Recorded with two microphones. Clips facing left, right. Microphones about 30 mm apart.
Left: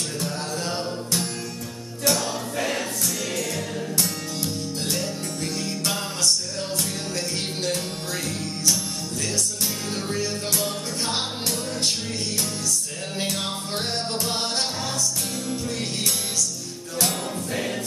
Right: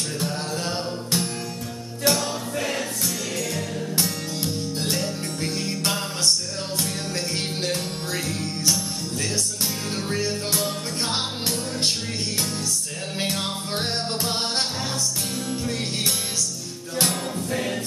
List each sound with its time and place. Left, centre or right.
0.2 s music: centre
2.0 s music: right
2.5 s music: centre
5.4 s music: centre
10.0 s music: centre
13.2 s music: centre
17.5 s choir: centre